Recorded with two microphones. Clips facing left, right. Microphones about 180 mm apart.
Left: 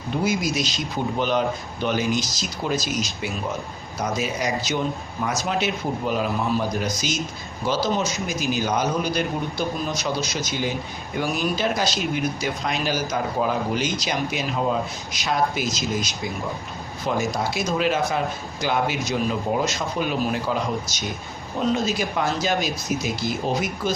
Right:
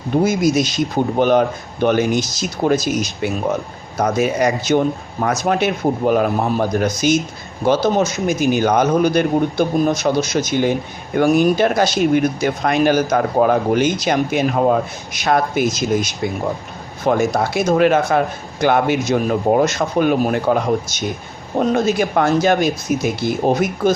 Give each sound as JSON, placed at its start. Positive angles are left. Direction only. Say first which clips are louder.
{"t": 0.1, "sound": "a man's voice", "louder": "right 8 dB", "side_deg": -50}